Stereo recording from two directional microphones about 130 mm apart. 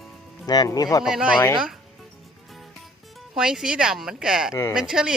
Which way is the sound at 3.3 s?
5° right (ahead or behind).